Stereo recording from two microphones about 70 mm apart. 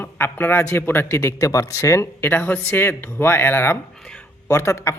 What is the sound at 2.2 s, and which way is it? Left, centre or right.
Speech, left.